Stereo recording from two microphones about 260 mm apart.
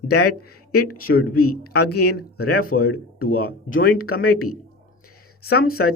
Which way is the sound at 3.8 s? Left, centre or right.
Left.